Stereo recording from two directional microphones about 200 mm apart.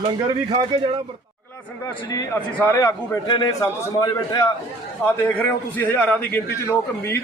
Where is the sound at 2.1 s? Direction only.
15° left (ahead or behind).